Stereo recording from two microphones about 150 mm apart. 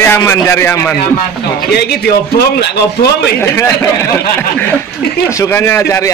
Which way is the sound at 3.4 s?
20° left (ahead or behind).